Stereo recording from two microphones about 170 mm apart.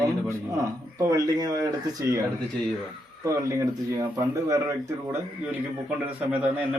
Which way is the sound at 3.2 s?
20° right (ahead or behind).